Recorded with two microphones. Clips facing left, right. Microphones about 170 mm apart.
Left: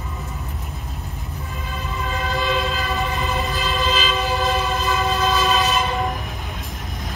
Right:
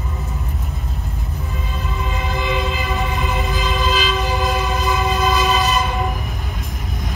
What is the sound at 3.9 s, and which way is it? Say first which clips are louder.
Train: right 2 dB; 5° right (ahead or behind).